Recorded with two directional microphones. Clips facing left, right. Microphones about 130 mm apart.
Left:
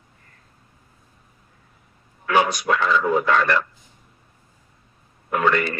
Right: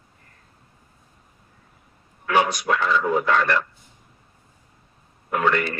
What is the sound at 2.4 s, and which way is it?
Speech, 90° left.